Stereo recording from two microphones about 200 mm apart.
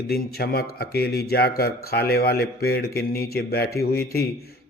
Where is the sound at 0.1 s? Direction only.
50° left (ahead or behind).